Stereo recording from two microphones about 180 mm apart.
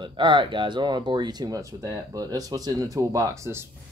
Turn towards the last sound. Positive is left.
turn(degrees=-15)  # may be behind; listen again after turning